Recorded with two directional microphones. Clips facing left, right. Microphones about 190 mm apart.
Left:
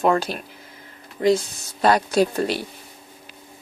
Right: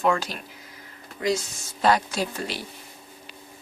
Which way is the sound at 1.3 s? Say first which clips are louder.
Left 7 dB; 55° left (ahead or behind).